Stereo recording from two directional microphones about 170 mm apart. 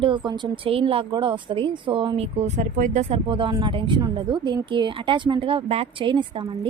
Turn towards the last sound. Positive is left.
turn(degrees=-30)  # may be behind; listen again after turning